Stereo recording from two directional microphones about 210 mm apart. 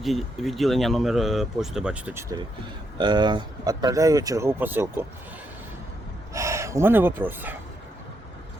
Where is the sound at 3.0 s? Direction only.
20° right (ahead or behind).